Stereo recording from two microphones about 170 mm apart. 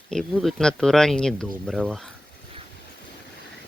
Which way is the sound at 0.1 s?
5° left (ahead or behind).